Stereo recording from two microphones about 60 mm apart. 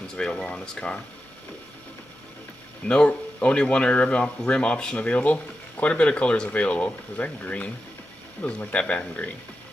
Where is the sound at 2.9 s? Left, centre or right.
Left.